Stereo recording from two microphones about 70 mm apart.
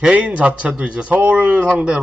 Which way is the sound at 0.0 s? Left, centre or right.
Centre.